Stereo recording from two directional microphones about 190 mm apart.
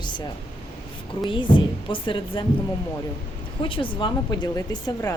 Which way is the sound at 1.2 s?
25° left (ahead or behind).